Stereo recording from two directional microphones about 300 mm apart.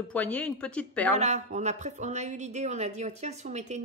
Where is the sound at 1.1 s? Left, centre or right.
Right.